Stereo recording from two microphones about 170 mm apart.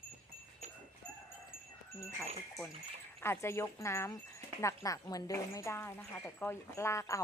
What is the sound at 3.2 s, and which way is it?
Speech, 15° left (ahead or behind).